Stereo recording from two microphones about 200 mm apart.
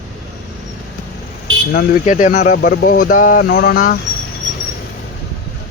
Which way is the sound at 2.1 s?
35° left (ahead or behind).